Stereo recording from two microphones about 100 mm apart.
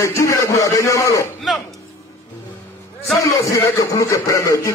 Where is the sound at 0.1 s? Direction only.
30° left (ahead or behind).